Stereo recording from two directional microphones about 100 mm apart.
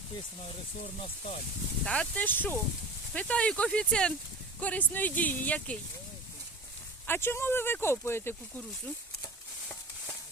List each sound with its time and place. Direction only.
1.8 s speech: 10° left (ahead or behind)
7.1 s speech: 25° left (ahead or behind)